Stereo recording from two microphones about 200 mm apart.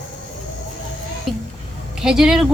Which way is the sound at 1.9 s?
5° right (ahead or behind).